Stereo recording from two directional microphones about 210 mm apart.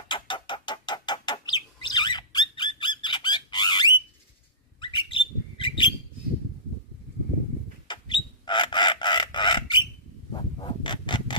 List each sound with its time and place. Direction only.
0.1 s rodents: 25° left (ahead or behind)
4.7 s bird: 20° left (ahead or behind)
7.9 s a sound: 20° left (ahead or behind)
10.3 s rub: 20° left (ahead or behind)